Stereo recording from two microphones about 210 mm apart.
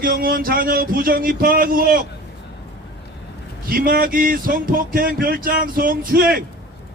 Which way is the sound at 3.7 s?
45° right (ahead or behind).